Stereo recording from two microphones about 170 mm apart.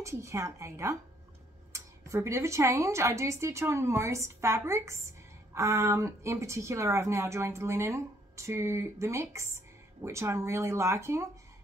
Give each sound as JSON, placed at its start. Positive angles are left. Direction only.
{"t": 0.0, "sound": "a woman's voice", "side_deg": -15}